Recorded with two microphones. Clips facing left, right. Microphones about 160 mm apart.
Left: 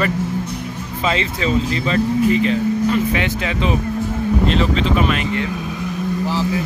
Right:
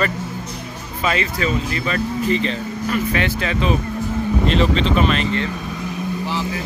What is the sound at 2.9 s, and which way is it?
Speech, 15° left (ahead or behind).